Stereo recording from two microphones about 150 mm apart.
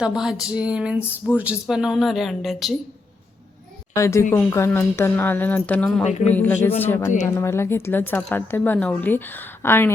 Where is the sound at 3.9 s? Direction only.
20° left (ahead or behind).